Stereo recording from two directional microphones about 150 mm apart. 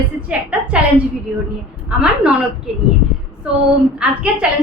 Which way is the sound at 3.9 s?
10° right (ahead or behind).